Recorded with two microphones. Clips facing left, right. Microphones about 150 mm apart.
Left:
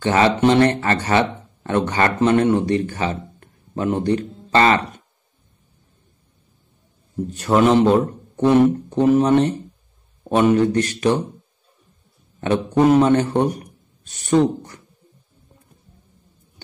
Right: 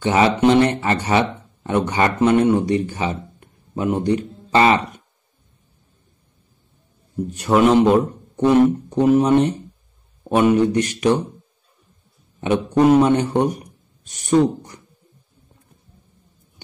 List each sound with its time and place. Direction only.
0.0 s speech: 15° right (ahead or behind)
7.2 s a man's voice: 15° right (ahead or behind)
12.8 s a man's voice: 15° right (ahead or behind)